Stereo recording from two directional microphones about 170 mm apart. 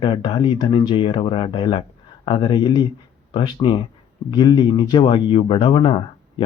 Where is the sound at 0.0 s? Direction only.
25° left (ahead or behind).